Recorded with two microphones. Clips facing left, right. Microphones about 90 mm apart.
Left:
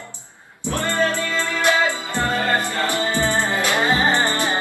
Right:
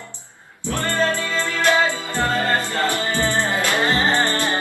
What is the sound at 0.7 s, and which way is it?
Music, 15° left (ahead or behind).